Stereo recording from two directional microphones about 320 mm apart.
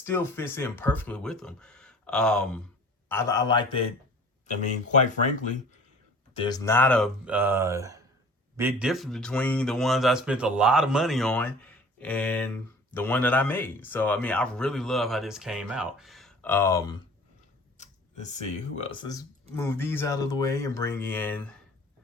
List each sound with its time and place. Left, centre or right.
0.0 s speech: centre
6.3 s speech: centre
18.8 s speech: centre